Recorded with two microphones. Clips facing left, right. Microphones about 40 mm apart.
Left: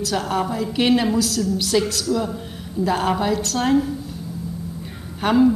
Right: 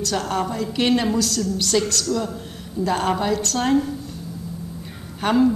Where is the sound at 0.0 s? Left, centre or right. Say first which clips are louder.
Left 1 dB; centre.